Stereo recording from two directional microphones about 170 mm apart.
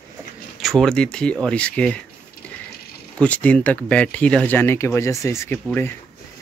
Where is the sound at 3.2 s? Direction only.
10° left (ahead or behind).